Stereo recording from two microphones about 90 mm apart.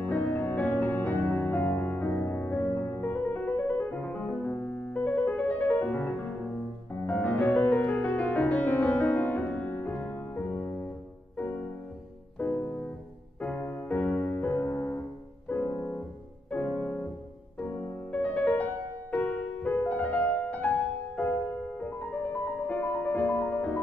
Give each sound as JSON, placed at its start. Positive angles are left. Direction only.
{"t": 0.0, "sound": "music", "side_deg": 20}
{"t": 12.4, "sound": "music", "side_deg": 20}
{"t": 18.1, "sound": "music", "side_deg": 15}